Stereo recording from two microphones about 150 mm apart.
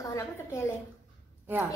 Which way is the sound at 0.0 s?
20° left (ahead or behind).